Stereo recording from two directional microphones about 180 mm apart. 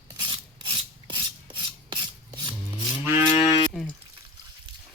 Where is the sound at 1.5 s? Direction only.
25° right (ahead or behind).